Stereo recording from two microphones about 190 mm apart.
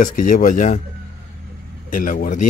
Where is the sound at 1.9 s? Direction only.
45° left (ahead or behind).